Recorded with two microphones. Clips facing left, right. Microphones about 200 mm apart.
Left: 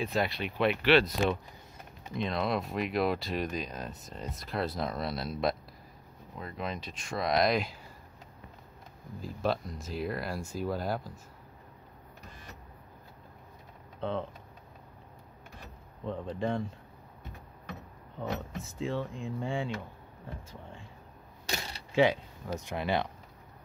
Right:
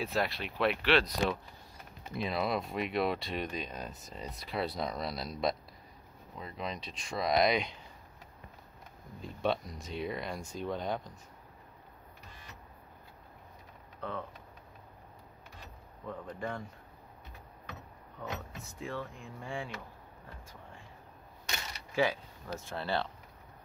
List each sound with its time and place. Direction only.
0.0 s speech: centre (ahead or behind)
9.2 s speech: centre (ahead or behind)
14.0 s speech: 25° left (ahead or behind)
16.1 s speech: 25° left (ahead or behind)
18.6 s speech: 25° left (ahead or behind)
21.5 s mechanisms: 30° left (ahead or behind)
22.5 s speech: 15° left (ahead or behind)